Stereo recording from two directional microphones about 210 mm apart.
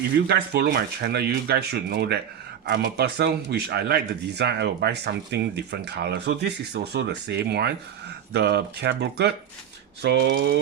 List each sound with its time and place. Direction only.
0.3 s speech: 50° right (ahead or behind)